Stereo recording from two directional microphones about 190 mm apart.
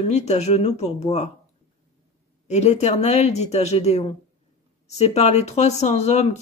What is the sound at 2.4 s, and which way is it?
Speech, 35° left (ahead or behind).